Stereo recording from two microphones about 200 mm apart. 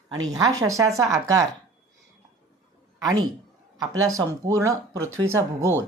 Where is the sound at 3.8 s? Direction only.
15° right (ahead or behind).